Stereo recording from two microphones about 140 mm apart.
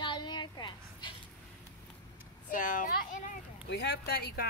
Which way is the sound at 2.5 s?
70° left (ahead or behind).